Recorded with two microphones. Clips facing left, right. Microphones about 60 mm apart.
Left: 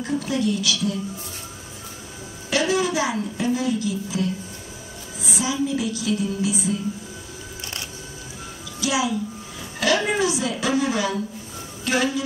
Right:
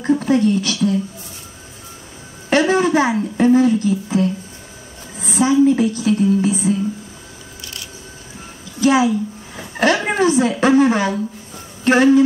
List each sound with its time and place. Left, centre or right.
0.0 s a woman's voice: right
2.5 s a woman's voice: right
8.8 s a woman's voice: right